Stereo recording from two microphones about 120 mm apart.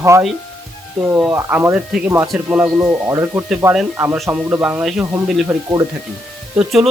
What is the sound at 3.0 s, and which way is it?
Speech, 20° right (ahead or behind).